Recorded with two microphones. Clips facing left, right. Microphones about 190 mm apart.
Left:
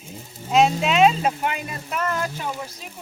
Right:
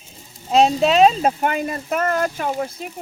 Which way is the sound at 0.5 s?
35° right (ahead or behind).